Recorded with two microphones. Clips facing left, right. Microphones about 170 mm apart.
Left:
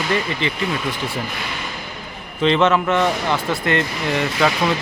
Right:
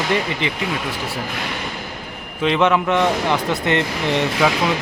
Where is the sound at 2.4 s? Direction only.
10° right (ahead or behind).